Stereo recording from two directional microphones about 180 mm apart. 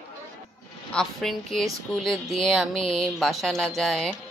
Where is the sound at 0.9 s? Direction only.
5° left (ahead or behind).